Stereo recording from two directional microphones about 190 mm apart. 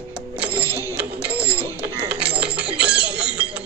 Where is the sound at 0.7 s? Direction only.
15° left (ahead or behind).